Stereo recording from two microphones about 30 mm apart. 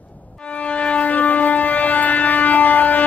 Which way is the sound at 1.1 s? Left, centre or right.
Left.